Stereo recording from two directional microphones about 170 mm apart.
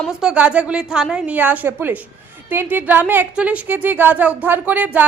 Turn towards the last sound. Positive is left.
turn(degrees=-10)  # may be behind; listen again after turning